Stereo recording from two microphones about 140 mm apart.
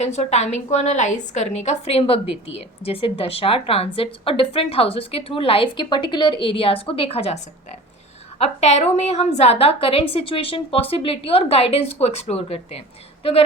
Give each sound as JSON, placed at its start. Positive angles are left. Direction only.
{"t": 0.0, "sound": "a woman's voice", "side_deg": 55}